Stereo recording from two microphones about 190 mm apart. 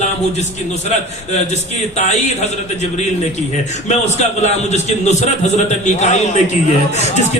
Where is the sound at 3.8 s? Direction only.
35° left (ahead or behind).